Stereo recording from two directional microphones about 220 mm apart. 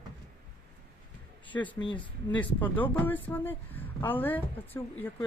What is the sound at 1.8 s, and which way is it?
Speech, 20° left (ahead or behind).